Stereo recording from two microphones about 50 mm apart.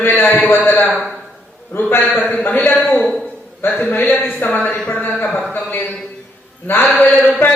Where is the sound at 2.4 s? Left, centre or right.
Left.